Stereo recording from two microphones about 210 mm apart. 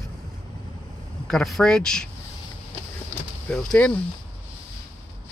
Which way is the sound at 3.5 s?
5° left (ahead or behind).